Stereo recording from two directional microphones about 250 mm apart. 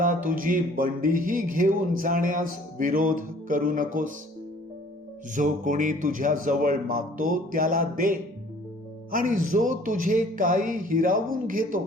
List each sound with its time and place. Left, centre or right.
0.3 s speech: right
5.3 s speech: right